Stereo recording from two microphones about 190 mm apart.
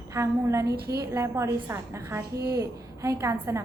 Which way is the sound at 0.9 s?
15° right (ahead or behind).